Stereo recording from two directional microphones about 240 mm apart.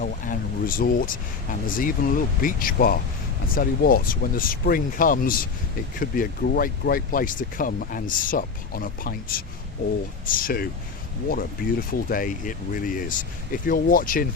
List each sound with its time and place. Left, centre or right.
0.0 s speech: left